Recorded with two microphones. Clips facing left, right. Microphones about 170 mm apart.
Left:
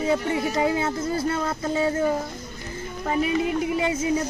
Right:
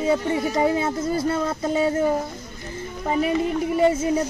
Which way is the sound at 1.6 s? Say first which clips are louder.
Right 2 dB; 25° right (ahead or behind).